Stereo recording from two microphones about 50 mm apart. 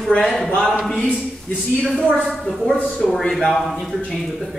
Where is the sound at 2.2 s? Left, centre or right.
Centre.